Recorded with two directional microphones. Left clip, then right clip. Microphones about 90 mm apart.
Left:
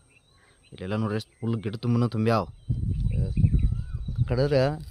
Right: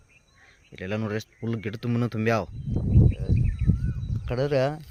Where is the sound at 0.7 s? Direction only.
25° left (ahead or behind).